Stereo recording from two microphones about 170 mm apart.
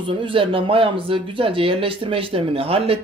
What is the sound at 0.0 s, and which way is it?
Speech, 30° right (ahead or behind).